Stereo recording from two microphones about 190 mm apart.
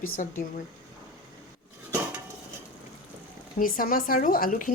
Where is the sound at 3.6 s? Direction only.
45° left (ahead or behind).